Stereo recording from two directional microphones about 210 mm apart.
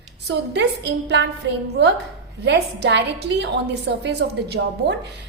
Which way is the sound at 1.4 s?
60° right (ahead or behind).